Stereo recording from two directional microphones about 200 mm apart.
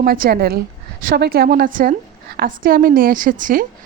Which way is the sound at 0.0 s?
45° right (ahead or behind).